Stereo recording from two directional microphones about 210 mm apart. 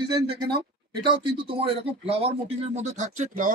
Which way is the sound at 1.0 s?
25° right (ahead or behind).